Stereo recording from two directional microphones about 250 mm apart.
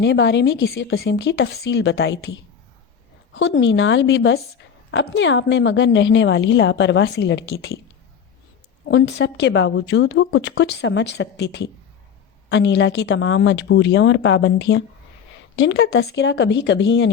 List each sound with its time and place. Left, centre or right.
0.0 s a woman's voice: left
8.9 s a woman's voice: left